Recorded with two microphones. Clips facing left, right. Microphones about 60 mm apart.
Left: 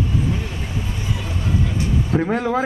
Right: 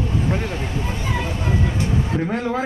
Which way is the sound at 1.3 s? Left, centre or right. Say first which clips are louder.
Right 1 dB; right.